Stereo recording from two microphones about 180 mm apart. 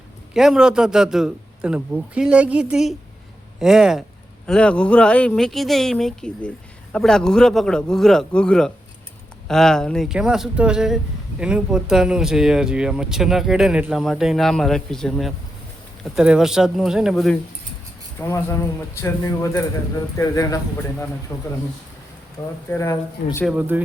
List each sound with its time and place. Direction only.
0.3 s speech: 5° right (ahead or behind)
18.2 s speech: 15° left (ahead or behind)
23.5 s speech: 10° right (ahead or behind)